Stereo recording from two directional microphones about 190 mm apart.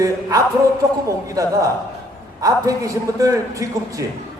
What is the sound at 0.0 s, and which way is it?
Speech, 15° right (ahead or behind).